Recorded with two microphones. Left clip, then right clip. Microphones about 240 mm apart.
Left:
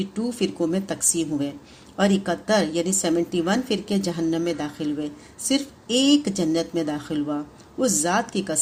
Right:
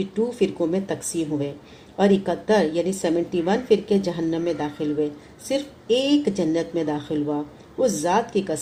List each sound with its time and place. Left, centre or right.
0.3 s a woman's voice: left